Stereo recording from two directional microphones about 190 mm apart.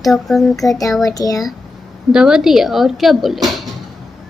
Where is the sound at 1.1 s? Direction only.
20° left (ahead or behind).